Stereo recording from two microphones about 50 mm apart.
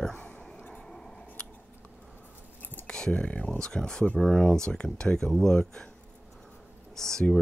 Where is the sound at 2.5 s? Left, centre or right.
Left.